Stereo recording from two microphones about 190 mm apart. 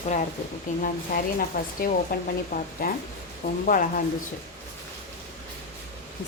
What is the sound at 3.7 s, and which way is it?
Speech, 45° left (ahead or behind).